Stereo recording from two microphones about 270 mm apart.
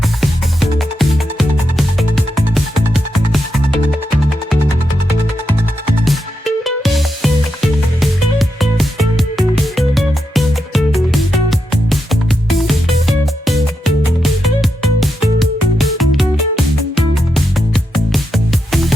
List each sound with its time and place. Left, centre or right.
0.2 s music: centre
6.1 s music: centre